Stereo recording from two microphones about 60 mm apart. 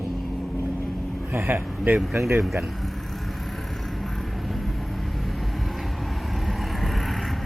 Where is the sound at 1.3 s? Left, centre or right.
Right.